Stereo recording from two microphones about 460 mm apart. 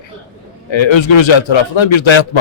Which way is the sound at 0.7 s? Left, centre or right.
Left.